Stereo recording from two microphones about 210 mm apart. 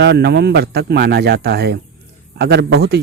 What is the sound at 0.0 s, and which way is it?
A man's voice, 50° right (ahead or behind).